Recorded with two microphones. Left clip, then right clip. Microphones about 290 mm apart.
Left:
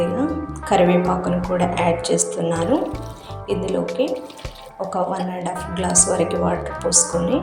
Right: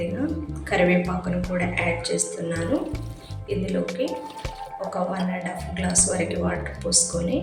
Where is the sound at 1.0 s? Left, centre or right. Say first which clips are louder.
Left 8 dB; centre.